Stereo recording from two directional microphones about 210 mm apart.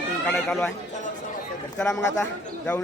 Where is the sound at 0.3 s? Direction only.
Centre (ahead or behind).